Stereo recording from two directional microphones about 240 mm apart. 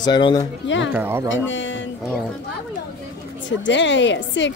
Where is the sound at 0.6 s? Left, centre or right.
Left.